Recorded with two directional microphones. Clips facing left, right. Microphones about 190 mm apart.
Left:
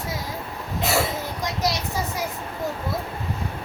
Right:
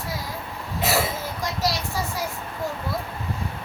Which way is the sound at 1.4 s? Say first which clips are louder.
Even; 20° left (ahead or behind).